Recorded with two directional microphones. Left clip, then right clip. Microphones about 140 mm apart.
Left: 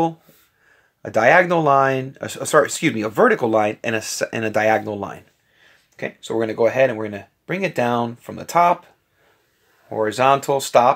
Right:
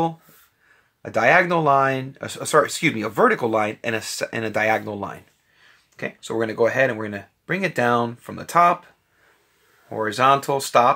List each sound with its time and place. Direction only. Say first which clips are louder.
1.0 s speech: left 3 dB; 25° left (ahead or behind)
5.9 s speech: left 2 dB; 10° left (ahead or behind)
9.8 s speech: left 1 dB; 15° left (ahead or behind)